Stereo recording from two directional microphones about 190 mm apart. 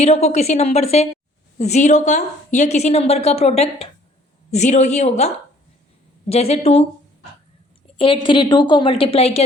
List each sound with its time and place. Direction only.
0.0 s a woman's voice: 35° left (ahead or behind)
7.9 s a woman's voice: 25° left (ahead or behind)